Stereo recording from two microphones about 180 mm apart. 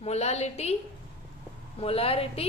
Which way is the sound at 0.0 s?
35° left (ahead or behind).